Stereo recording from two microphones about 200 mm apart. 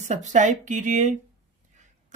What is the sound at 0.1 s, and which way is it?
Speech, 35° right (ahead or behind).